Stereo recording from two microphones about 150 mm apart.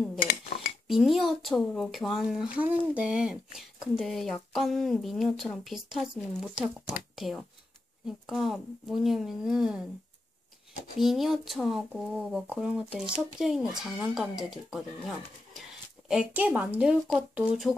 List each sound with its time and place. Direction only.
0.2 s dishes: 70° left (ahead or behind)
0.8 s speech: centre (ahead or behind)
11.0 s speech: centre (ahead or behind)